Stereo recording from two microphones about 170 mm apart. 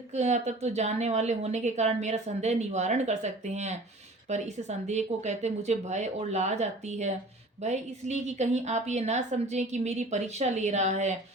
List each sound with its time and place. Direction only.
0.1 s a woman's voice: 40° right (ahead or behind)